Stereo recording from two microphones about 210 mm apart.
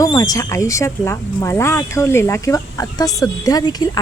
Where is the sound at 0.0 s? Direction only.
15° left (ahead or behind).